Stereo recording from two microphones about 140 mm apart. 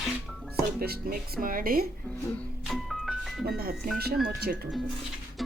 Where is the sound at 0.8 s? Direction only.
90° right.